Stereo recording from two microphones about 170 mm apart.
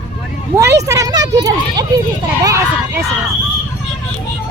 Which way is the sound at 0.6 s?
20° right (ahead or behind).